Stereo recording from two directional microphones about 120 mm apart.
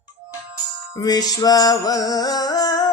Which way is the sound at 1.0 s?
35° left (ahead or behind).